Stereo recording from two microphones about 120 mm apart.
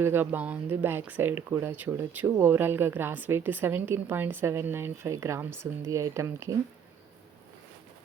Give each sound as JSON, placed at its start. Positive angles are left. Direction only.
{"t": 0.0, "sound": "speech", "side_deg": -15}